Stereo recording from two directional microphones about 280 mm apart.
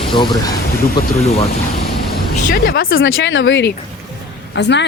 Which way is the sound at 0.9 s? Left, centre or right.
Left.